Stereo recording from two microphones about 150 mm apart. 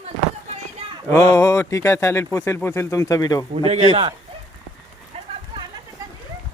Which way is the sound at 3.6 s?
45° right (ahead or behind).